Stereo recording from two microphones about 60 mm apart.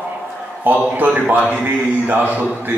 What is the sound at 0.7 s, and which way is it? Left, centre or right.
A man's voice, right.